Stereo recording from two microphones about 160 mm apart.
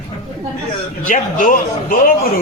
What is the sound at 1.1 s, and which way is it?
Speech, 55° left (ahead or behind).